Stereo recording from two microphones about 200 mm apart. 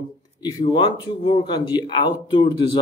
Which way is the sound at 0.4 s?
20° left (ahead or behind).